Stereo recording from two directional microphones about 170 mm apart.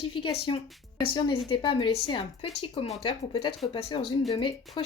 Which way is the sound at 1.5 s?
30° left (ahead or behind).